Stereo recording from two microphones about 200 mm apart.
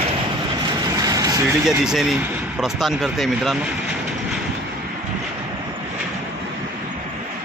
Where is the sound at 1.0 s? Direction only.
20° right (ahead or behind).